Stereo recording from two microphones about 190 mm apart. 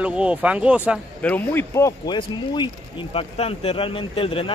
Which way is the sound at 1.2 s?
10° left (ahead or behind).